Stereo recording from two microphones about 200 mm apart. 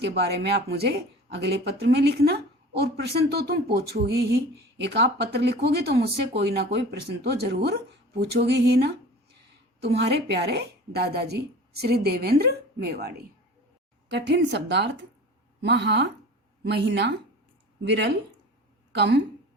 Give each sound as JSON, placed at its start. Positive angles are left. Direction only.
{"t": 0.0, "sound": "a woman's voice", "side_deg": -55}